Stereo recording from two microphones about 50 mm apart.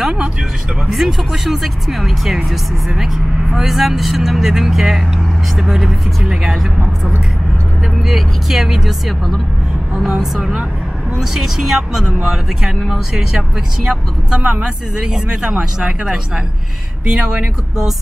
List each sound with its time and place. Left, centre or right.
0.0 s speech: centre
8.0 s speech: centre
11.1 s speech: centre